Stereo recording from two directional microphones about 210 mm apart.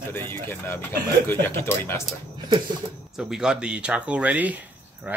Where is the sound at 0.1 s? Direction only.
10° left (ahead or behind).